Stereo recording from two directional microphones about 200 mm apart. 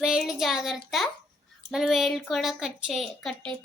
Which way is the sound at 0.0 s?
5° right (ahead or behind).